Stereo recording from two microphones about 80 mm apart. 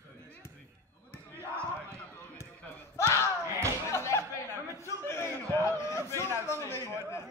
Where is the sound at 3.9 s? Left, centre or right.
Left.